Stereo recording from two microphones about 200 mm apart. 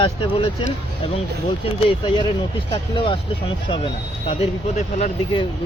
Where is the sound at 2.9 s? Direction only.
25° left (ahead or behind).